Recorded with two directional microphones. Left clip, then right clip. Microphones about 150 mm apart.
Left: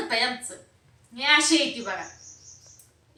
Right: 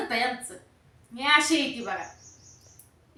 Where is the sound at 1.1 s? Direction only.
15° right (ahead or behind).